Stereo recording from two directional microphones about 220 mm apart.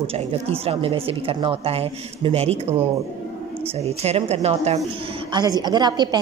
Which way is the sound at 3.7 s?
30° right (ahead or behind).